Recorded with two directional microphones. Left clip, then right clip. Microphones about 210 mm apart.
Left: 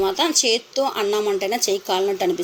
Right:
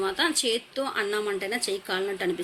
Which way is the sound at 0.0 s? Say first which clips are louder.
Left 6 dB; 5° left (ahead or behind).